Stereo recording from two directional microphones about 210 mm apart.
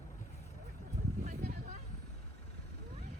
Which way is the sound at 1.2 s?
35° right (ahead or behind).